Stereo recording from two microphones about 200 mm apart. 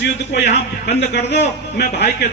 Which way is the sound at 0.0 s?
60° left (ahead or behind).